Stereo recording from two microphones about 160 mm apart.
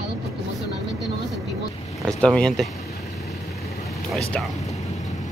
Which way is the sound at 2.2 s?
5° left (ahead or behind).